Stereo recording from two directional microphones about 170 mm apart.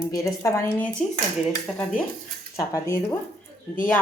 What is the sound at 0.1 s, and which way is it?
Speech, 20° left (ahead or behind).